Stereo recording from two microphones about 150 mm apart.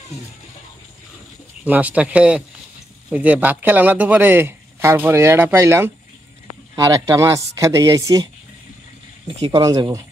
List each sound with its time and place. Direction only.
1.6 s speech: 10° right (ahead or behind)
9.5 s speech: 25° right (ahead or behind)